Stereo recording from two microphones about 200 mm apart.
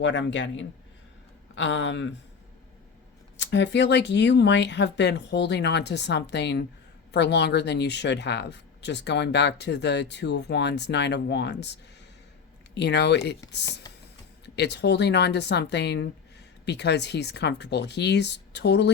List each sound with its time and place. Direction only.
0.0 s speech: 65° left (ahead or behind)
3.3 s speech: 60° left (ahead or behind)